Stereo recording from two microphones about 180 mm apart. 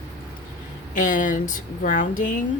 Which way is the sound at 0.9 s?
45° left (ahead or behind).